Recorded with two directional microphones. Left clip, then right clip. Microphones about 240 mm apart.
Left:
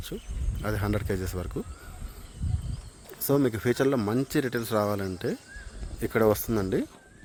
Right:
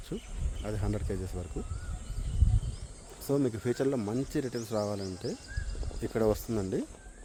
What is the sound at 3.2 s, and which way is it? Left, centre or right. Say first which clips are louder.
Speech: left 5 dB; left.